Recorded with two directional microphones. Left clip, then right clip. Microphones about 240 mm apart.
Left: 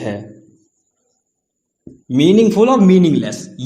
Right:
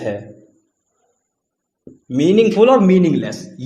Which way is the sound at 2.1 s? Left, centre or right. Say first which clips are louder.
Left 1 dB; left.